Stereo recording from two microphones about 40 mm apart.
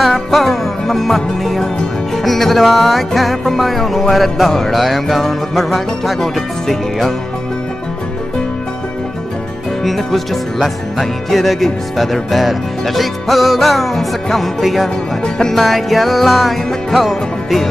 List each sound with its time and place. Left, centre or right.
0.0 s music: centre
9.8 s music: centre
15.2 s music: centre
15.5 s music: centre